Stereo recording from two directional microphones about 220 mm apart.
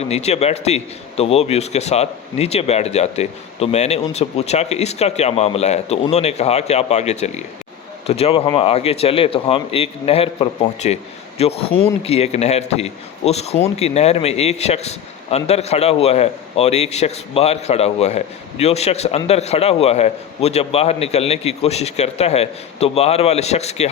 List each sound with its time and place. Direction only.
0.0 s a man's voice: 30° left (ahead or behind)